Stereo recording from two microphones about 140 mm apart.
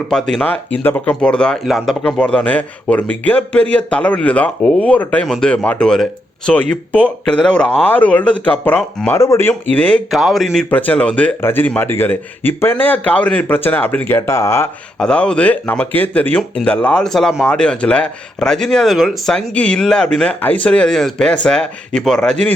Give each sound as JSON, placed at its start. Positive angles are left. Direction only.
{"t": 0.1, "sound": "speech", "side_deg": 5}
{"t": 10.1, "sound": "speech", "side_deg": 0}
{"t": 14.9, "sound": "speech", "side_deg": 5}